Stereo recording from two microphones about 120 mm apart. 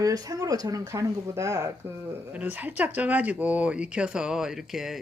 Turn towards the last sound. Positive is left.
turn(degrees=0)  # may be behind; listen again after turning